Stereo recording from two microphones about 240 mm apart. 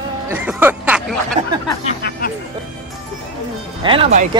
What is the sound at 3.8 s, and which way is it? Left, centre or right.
Speech, right.